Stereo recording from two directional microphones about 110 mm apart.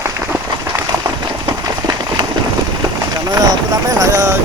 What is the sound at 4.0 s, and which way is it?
Vehicle, 30° right (ahead or behind).